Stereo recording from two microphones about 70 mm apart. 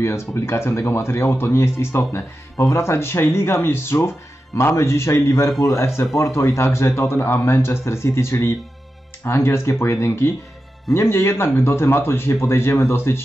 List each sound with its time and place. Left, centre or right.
0.0 s speech: left